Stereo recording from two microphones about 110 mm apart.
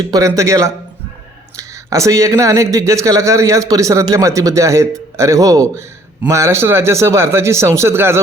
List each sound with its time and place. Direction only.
0.1 s speech: 30° right (ahead or behind)